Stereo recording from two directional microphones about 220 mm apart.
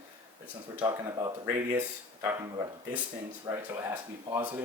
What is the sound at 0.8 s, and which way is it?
Speech, 20° right (ahead or behind).